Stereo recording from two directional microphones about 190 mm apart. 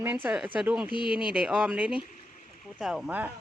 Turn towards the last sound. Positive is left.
turn(degrees=-5)  # may be behind; listen again after turning